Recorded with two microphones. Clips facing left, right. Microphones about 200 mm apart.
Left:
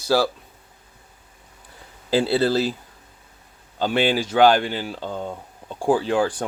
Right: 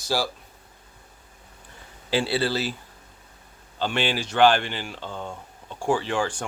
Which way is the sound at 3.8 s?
45° left (ahead or behind).